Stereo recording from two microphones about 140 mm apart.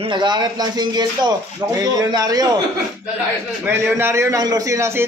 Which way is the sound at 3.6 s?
15° right (ahead or behind).